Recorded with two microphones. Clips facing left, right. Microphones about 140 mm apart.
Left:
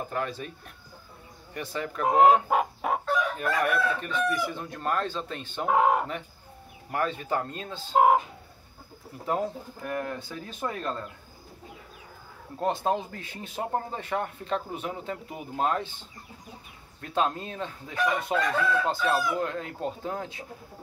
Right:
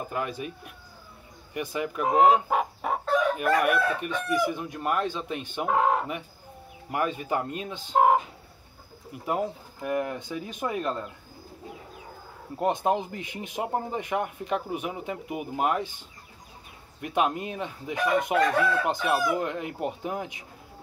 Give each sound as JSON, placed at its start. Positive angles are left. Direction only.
{"t": 0.1, "sound": "speech", "side_deg": -10}
{"t": 1.5, "sound": "speech", "side_deg": -10}
{"t": 2.0, "sound": "chicken", "side_deg": 0}
{"t": 3.3, "sound": "speech", "side_deg": -15}
{"t": 5.7, "sound": "chicken", "side_deg": 5}
{"t": 6.9, "sound": "speech", "side_deg": -15}
{"t": 7.9, "sound": "chicken", "side_deg": 5}
{"t": 9.2, "sound": "speech", "side_deg": -10}
{"t": 12.5, "sound": "speech", "side_deg": -15}
{"t": 17.0, "sound": "speech", "side_deg": -15}